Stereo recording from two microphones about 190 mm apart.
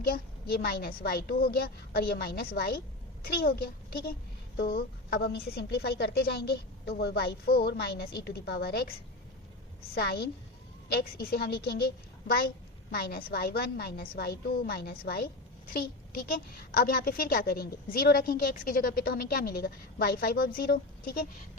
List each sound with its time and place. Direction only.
0.0 s a child's voice: 50° left (ahead or behind)
9.9 s a child's voice: 55° left (ahead or behind)
12.9 s a child's voice: 55° left (ahead or behind)